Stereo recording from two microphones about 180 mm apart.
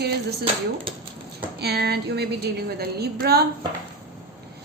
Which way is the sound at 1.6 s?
65° right (ahead or behind).